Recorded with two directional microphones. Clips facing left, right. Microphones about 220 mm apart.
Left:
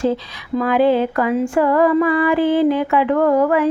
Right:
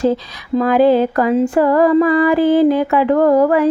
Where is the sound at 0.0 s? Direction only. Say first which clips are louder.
Right 3 dB; 40° right (ahead or behind).